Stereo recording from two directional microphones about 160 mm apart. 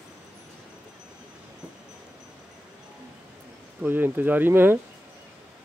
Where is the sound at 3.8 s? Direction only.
10° right (ahead or behind).